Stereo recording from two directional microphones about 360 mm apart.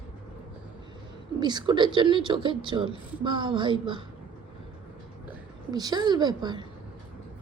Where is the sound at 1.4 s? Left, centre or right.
Centre.